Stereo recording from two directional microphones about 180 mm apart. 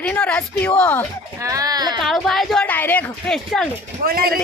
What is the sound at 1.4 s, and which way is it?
Speech, 20° right (ahead or behind).